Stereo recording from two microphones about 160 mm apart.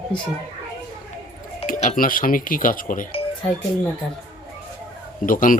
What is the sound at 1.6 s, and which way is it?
Speech, 55° left (ahead or behind).